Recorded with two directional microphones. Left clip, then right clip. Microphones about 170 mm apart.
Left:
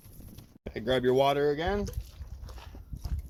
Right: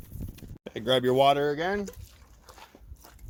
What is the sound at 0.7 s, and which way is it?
Speech, 45° right (ahead or behind).